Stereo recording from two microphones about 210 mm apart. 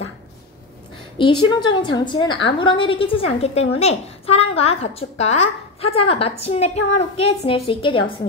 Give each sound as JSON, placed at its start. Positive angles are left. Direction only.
{"t": 1.1, "sound": "a woman's voice", "side_deg": 25}